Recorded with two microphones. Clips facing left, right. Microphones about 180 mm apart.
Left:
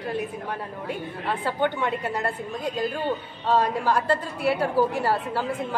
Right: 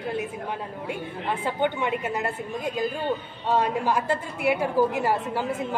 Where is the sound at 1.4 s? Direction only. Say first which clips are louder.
Left 1 dB; 15° right (ahead or behind).